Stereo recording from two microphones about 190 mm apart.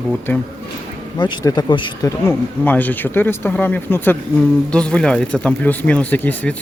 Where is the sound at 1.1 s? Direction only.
25° left (ahead or behind).